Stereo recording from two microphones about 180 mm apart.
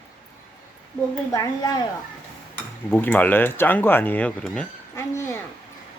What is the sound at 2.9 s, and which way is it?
Speech, 10° left (ahead or behind).